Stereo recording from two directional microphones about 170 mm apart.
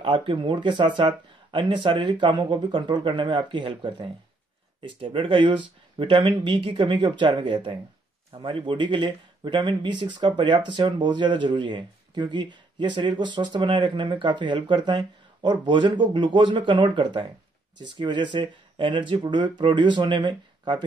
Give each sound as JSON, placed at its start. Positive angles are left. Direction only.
{"t": 0.0, "sound": "speech", "side_deg": -30}